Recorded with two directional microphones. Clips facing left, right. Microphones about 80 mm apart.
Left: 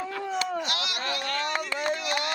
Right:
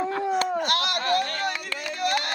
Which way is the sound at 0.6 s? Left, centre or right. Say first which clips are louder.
Right 6 dB; right.